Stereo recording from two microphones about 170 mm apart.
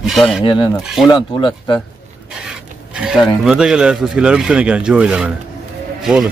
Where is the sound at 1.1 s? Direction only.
30° left (ahead or behind).